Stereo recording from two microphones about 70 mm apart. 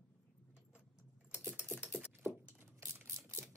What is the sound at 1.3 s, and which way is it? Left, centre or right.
Typing, right.